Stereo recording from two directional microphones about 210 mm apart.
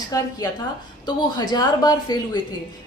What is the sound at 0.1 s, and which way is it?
A woman's voice, 15° left (ahead or behind).